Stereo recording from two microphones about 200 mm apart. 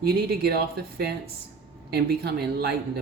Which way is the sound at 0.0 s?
50° right (ahead or behind).